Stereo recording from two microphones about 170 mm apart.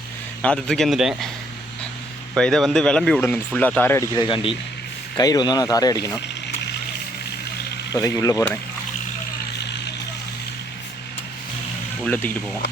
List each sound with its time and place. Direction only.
0.4 s speech: 5° left (ahead or behind)
2.3 s speech: 5° left (ahead or behind); by 6.2 s 20° left (ahead or behind)
7.9 s speech: 20° left (ahead or behind)
12.0 s speech: 10° left (ahead or behind)